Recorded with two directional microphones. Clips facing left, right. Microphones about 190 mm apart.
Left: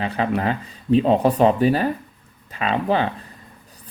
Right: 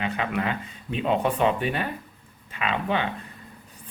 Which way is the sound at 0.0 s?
35° left (ahead or behind).